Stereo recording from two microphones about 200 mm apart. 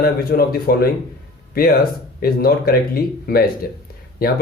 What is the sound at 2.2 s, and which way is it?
Speech, 50° left (ahead or behind).